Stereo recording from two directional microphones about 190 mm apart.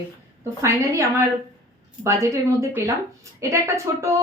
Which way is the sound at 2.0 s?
15° right (ahead or behind).